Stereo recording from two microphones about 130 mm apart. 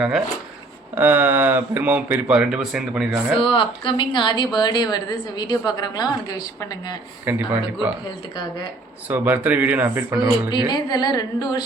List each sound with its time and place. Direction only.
0.9 s speech: 15° right (ahead or behind)
3.3 s speech: 45° left (ahead or behind)
7.3 s speech: 15° right (ahead or behind)
9.0 s speech: 15° right (ahead or behind)
10.5 s speech: 35° left (ahead or behind)